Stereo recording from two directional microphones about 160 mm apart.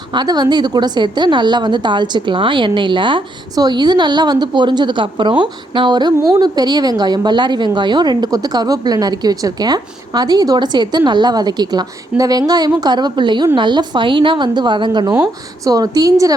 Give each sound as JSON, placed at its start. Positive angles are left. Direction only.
{"t": 0.1, "sound": "a woman's voice", "side_deg": -25}